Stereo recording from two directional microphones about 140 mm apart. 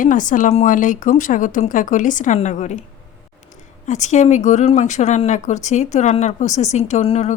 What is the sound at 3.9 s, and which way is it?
Speech, 60° left (ahead or behind).